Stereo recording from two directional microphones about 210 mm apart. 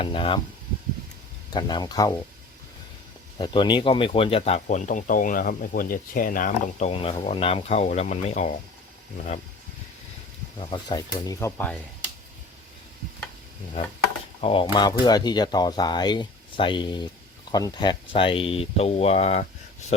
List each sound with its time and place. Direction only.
0.0 s speech: 25° left (ahead or behind)
1.5 s speech: 20° left (ahead or behind)
3.3 s speech: 20° left (ahead or behind)
10.7 s speech: 20° left (ahead or behind)
14.4 s speech: 25° left (ahead or behind)